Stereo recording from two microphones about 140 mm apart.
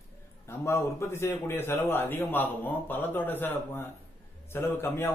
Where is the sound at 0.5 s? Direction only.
20° left (ahead or behind).